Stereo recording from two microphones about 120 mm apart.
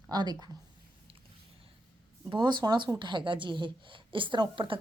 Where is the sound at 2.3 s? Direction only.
40° right (ahead or behind).